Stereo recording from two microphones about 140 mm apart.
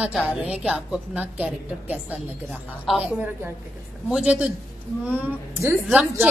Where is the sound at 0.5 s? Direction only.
5° right (ahead or behind).